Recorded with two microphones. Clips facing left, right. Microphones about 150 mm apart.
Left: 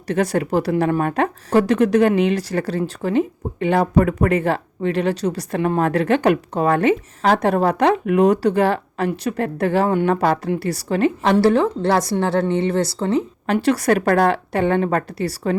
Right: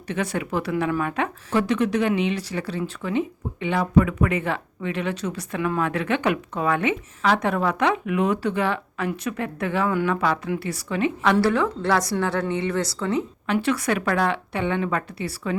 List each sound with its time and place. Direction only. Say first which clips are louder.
0.1 s speech: left 7 dB; 40° left (ahead or behind)